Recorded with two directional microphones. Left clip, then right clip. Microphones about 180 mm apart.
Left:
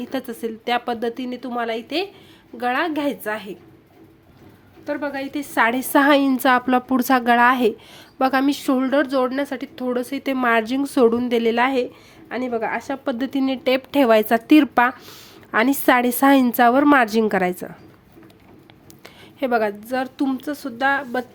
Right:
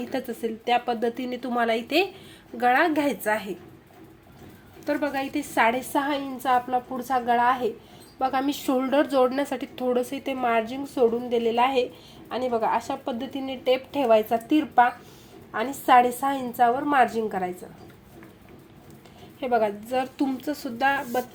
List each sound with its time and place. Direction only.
0.0 s a woman's voice: 15° left (ahead or behind)
4.9 s a woman's voice: 5° left (ahead or behind); by 5.8 s 25° left (ahead or behind)
5.9 s a woman's voice: 40° left (ahead or behind)
12.3 s a woman's voice: 65° left (ahead or behind)
13.1 s a woman's voice: 35° left (ahead or behind)
19.4 s a woman's voice: 30° left (ahead or behind)